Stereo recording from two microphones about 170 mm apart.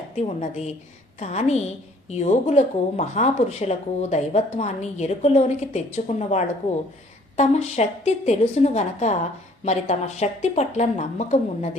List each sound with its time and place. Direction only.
0.2 s speech: 40° left (ahead or behind)